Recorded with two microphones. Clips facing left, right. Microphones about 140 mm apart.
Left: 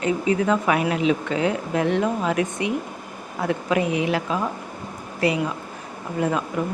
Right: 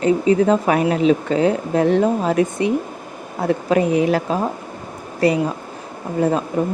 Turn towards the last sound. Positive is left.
turn(degrees=-35)  # may be behind; listen again after turning